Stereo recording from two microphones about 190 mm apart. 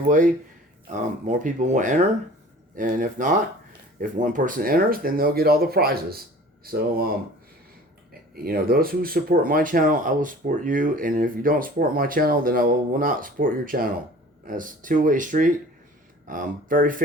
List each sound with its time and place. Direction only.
0.9 s speech: 40° right (ahead or behind)
8.4 s speech: 50° right (ahead or behind)